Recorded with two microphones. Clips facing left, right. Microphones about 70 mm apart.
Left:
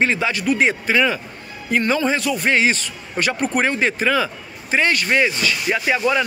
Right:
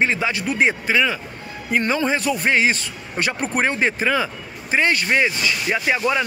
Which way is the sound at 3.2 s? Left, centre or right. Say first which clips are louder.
Left 2 dB; right.